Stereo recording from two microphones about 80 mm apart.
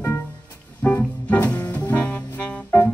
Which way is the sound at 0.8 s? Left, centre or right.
Left.